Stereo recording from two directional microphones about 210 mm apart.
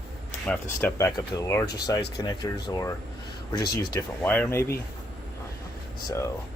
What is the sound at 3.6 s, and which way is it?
Speech, 50° left (ahead or behind).